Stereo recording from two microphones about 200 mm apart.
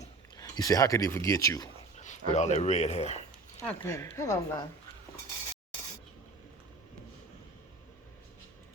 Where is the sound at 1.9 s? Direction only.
35° left (ahead or behind).